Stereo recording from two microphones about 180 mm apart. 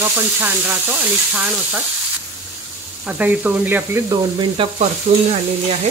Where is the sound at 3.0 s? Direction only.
10° right (ahead or behind).